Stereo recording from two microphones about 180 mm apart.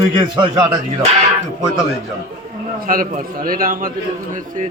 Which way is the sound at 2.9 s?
50° right (ahead or behind).